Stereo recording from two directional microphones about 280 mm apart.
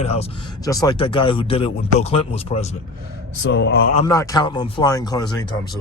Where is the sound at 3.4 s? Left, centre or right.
Left.